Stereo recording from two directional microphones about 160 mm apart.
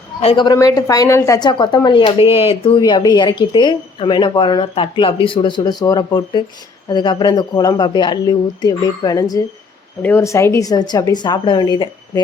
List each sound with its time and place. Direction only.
0.2 s a woman's voice: 35° left (ahead or behind)